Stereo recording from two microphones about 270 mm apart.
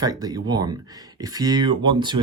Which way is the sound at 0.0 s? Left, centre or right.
Centre.